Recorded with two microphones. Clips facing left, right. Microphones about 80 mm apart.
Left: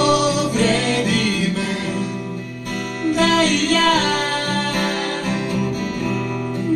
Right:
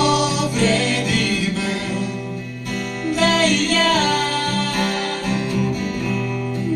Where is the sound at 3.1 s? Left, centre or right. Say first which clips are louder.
Left 1 dB; left.